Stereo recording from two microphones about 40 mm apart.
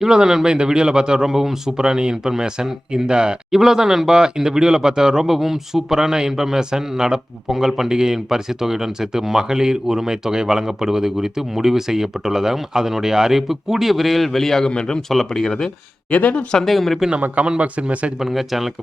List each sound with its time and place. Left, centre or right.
0.0 s a man's voice: centre
14.7 s speech: left
16.0 s speech: left
16.6 s speech: centre
17.2 s a man's voice: right
18.2 s speech: centre